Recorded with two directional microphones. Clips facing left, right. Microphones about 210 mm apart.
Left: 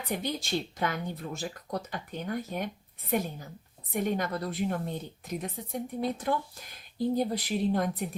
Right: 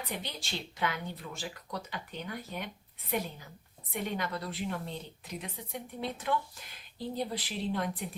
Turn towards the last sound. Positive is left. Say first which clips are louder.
# left 6 dB
turn(degrees=45)  # may be behind; listen again after turning